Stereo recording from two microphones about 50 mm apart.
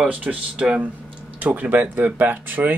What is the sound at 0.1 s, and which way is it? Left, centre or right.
Speech, right.